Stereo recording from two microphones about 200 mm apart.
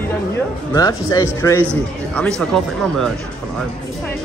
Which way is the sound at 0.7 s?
20° left (ahead or behind).